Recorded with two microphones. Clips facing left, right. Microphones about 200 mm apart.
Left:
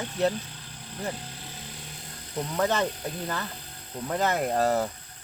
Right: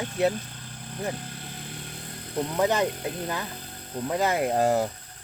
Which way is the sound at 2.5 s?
15° right (ahead or behind).